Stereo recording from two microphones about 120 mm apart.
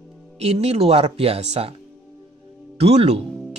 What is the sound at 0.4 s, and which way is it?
A woman's voice, 60° right (ahead or behind).